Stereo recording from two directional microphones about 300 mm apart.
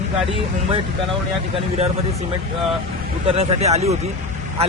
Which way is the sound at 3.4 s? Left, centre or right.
Right.